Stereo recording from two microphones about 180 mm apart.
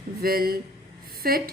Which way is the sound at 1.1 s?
55° right (ahead or behind).